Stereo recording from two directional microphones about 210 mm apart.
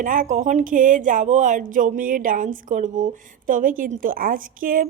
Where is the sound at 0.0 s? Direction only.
40° right (ahead or behind).